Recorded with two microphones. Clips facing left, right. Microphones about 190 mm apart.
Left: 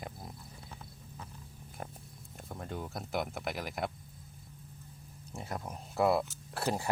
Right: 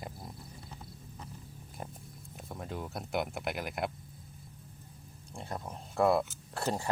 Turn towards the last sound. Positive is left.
turn(degrees=15)  # may be behind; listen again after turning